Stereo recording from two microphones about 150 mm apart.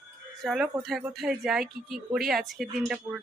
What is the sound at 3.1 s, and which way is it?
Speech, 30° right (ahead or behind).